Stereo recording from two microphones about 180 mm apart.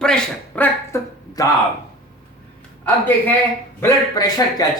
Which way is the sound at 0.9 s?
20° left (ahead or behind).